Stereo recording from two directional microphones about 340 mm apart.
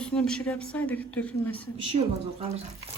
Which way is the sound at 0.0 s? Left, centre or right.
Centre.